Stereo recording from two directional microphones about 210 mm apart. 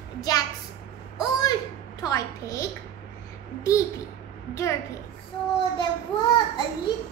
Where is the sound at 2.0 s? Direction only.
15° left (ahead or behind).